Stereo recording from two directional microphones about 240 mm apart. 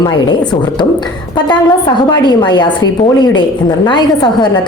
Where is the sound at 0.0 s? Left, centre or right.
Centre.